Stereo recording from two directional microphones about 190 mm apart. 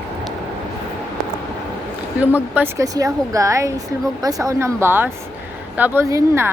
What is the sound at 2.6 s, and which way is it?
Speech, 15° right (ahead or behind).